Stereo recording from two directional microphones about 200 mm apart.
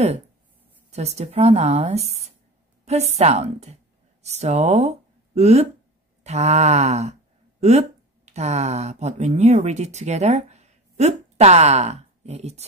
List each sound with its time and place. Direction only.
0.9 s a woman's voice: 30° right (ahead or behind)